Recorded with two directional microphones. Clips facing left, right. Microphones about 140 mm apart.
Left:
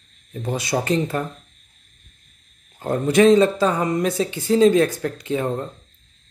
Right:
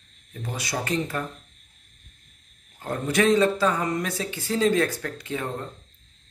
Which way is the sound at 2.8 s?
25° left (ahead or behind).